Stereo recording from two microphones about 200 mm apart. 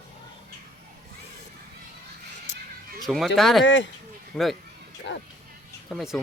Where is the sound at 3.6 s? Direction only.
60° left (ahead or behind).